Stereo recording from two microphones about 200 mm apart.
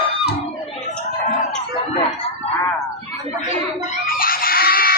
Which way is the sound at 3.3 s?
35° left (ahead or behind).